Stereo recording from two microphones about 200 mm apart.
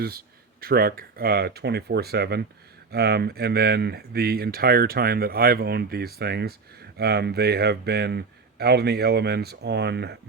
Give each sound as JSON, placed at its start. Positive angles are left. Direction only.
{"t": 0.0, "sound": "speech", "side_deg": -50}